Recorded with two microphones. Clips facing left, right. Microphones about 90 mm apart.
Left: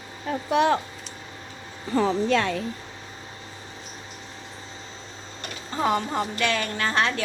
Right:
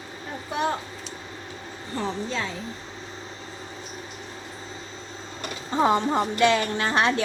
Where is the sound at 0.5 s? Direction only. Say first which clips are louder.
Left 6 dB; 90° left.